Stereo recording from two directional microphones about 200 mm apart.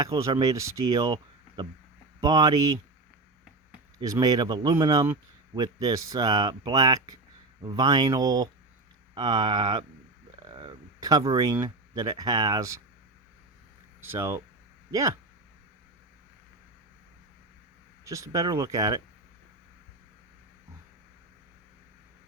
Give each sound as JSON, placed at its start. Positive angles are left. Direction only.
{"t": 0.0, "sound": "speech", "side_deg": -20}
{"t": 3.9, "sound": "speech", "side_deg": -20}
{"t": 14.0, "sound": "speech", "side_deg": -15}
{"t": 18.0, "sound": "speech", "side_deg": -15}